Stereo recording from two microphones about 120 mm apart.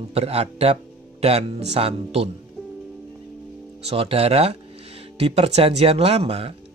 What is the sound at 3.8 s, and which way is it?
Speech, 55° right (ahead or behind).